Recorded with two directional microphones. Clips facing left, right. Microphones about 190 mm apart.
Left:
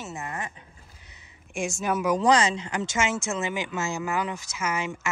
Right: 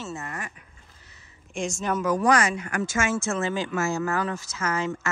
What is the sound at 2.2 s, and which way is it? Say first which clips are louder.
Speech: left 1 dB; 20° left (ahead or behind).